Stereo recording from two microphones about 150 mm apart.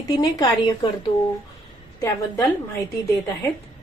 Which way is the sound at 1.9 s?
20° left (ahead or behind).